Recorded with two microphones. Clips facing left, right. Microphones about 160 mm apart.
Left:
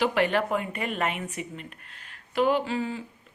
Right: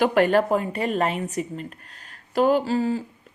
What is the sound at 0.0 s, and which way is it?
A woman's voice, 45° right (ahead or behind).